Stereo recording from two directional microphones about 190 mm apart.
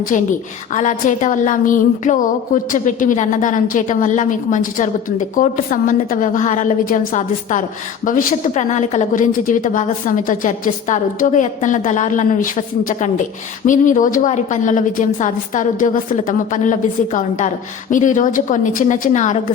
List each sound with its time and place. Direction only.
0.7 s a woman's voice: 40° left (ahead or behind)